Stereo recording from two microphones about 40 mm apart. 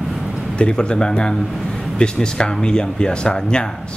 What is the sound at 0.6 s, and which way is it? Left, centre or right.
Speech, left.